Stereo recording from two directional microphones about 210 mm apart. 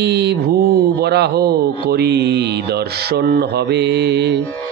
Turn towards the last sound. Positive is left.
turn(degrees=-55)  # may be behind; listen again after turning